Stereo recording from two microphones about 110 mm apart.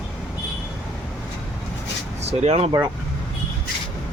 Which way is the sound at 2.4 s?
80° right.